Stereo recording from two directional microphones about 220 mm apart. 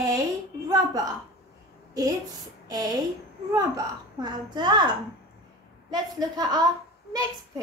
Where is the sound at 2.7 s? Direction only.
15° right (ahead or behind).